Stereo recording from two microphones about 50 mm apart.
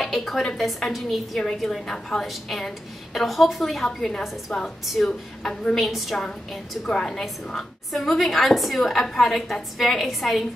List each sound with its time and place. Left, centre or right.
0.0 s a woman's voice: centre
5.0 s a woman's voice: centre
5.8 s a woman's voice: centre
6.9 s a woman's voice: centre